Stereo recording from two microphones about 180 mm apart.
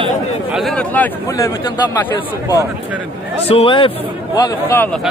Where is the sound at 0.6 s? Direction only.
5° left (ahead or behind).